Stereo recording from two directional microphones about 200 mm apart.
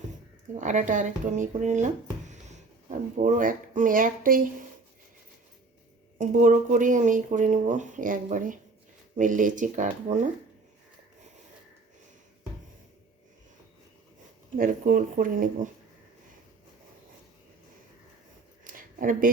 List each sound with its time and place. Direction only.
0.6 s speech: 40° right (ahead or behind)
6.1 s speech: 40° right (ahead or behind)
14.5 s speech: 40° right (ahead or behind)
18.6 s a sound: 45° right (ahead or behind)